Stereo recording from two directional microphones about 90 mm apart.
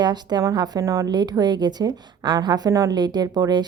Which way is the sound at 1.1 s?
50° right (ahead or behind).